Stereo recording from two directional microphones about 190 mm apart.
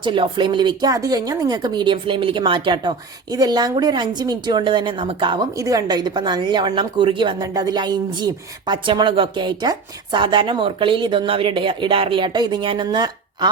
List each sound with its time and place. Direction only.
0.0 s speech: 25° right (ahead or behind)